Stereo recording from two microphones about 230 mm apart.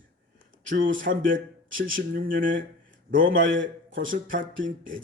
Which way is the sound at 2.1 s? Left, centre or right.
Right.